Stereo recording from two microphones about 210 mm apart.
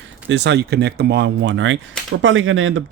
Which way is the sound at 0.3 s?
55° right (ahead or behind).